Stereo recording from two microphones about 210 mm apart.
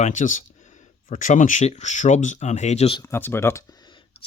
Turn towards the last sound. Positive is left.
turn(degrees=15)  # may be behind; listen again after turning